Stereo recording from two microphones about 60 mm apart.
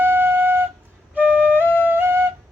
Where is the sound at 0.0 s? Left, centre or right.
Right.